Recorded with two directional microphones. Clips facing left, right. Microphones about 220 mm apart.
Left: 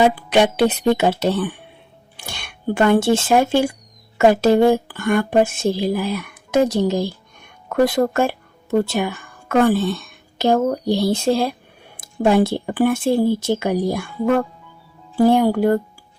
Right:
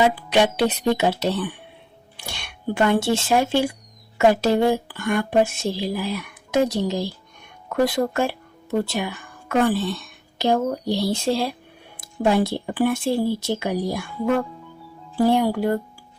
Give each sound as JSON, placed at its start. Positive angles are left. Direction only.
{"t": 0.0, "sound": "a woman's voice", "side_deg": 55}